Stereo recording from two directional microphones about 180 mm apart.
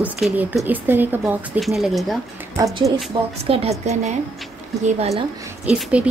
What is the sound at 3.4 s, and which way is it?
Speech, 35° right (ahead or behind).